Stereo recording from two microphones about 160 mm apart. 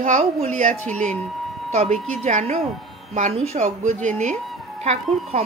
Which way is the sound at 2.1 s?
45° right (ahead or behind).